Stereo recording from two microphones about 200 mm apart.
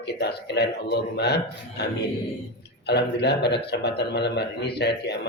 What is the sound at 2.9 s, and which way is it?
A man's voice, 55° left (ahead or behind).